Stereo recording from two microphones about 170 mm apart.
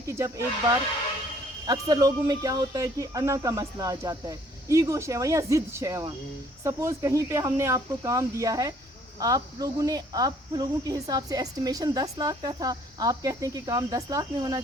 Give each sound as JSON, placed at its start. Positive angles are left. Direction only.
{"t": 0.0, "sound": "speech", "side_deg": -15}
{"t": 1.6, "sound": "speech", "side_deg": -20}